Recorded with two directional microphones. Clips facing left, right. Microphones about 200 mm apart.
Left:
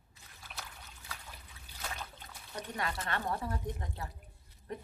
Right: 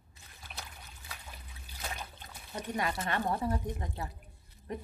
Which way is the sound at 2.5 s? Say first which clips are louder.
Right 4 dB; 15° right (ahead or behind).